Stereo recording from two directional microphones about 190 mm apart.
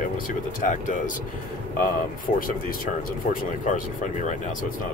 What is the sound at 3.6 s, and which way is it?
Speech, 40° left (ahead or behind).